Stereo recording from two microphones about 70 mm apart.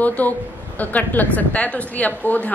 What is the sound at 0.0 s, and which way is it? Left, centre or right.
A woman's voice, left.